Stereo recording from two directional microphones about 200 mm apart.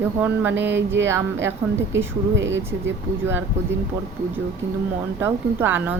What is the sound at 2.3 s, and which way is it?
Speech, 65° right (ahead or behind).